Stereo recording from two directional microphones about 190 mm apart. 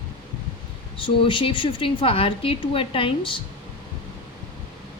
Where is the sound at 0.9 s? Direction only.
25° left (ahead or behind).